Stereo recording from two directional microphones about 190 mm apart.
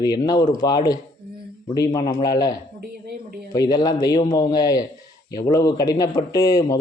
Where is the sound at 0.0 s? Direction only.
20° left (ahead or behind).